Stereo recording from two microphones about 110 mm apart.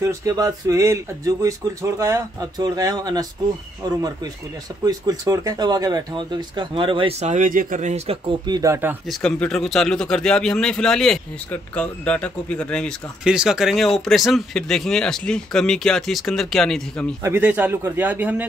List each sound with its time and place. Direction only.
0.0 s speech: 30° right (ahead or behind); by 7.2 s 50° right (ahead or behind)
7.8 s speech: 75° right (ahead or behind)
8.3 s speech: 40° right (ahead or behind)
8.6 s speech: 25° right (ahead or behind)
9.1 s speech: 5° left (ahead or behind)
13.2 s speech: 5° right (ahead or behind)
17.2 s speech: 20° right (ahead or behind)